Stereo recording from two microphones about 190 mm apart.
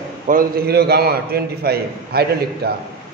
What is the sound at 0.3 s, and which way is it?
A man's voice, 50° right (ahead or behind).